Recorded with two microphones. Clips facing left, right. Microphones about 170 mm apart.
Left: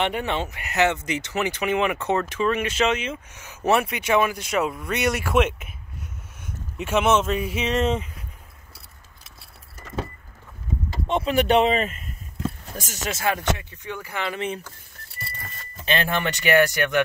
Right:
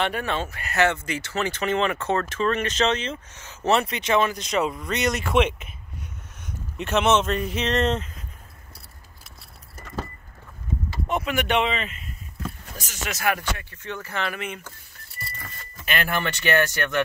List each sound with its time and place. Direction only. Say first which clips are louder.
0.0 s speech: left 1 dB; 20° left (ahead or behind)
11.1 s speech: left 5 dB; 30° left (ahead or behind)
13.1 s speech: left 1 dB; 25° left (ahead or behind)
15.7 s speech: left 2 dB; 25° left (ahead or behind)